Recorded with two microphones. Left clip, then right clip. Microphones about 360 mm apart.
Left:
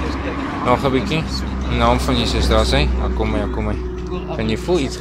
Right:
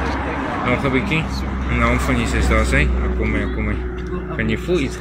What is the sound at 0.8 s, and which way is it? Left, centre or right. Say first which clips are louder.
Speech: even; centre.